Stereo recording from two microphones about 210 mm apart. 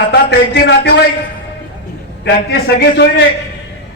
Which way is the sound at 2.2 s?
55° left (ahead or behind).